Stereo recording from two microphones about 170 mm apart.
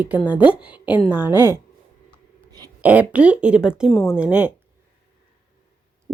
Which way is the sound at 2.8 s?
10° right (ahead or behind).